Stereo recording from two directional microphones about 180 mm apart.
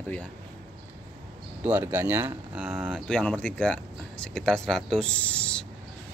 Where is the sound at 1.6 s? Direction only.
10° right (ahead or behind); by 5.6 s 5° left (ahead or behind).